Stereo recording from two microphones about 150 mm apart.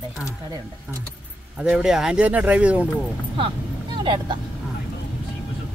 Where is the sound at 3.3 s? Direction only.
35° right (ahead or behind).